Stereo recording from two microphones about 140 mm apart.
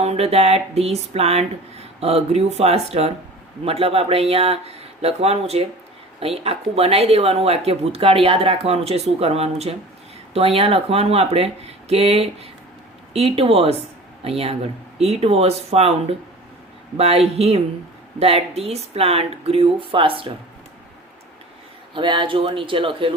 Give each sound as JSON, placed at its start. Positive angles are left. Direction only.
{"t": 0.0, "sound": "speech", "side_deg": -50}
{"t": 21.9, "sound": "speech", "side_deg": -35}